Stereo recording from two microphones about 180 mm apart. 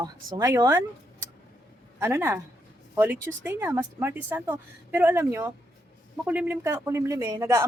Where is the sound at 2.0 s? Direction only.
15° right (ahead or behind).